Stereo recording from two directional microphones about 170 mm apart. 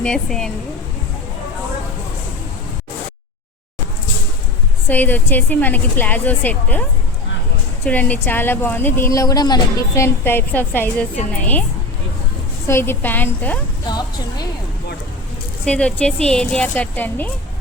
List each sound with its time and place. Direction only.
0.0 s speech: 5° left (ahead or behind)
4.9 s a woman's voice: 10° left (ahead or behind)
7.9 s a woman's voice: 10° left (ahead or behind)
12.6 s a woman's voice: 15° left (ahead or behind)
13.8 s speech: 25° left (ahead or behind)
15.6 s a woman's voice: 5° left (ahead or behind)